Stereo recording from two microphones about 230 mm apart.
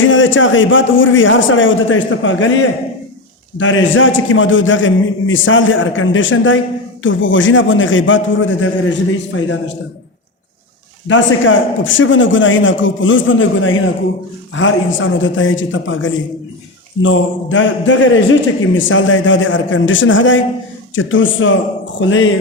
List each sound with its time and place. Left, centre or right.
0.0 s a man's voice: left
11.1 s a man's voice: left